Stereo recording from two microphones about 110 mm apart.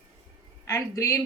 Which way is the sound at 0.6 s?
30° left (ahead or behind).